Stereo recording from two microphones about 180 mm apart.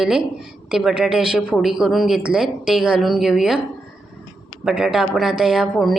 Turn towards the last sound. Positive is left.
turn(degrees=0)  # may be behind; listen again after turning